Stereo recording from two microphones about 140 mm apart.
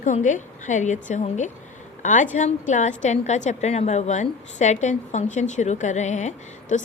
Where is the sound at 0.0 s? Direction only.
65° left (ahead or behind).